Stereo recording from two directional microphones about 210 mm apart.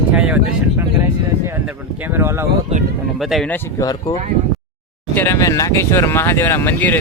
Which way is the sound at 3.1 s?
Centre (ahead or behind).